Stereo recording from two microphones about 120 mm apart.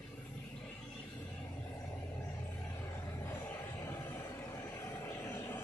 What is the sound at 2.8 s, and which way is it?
Vehicle, 25° left (ahead or behind).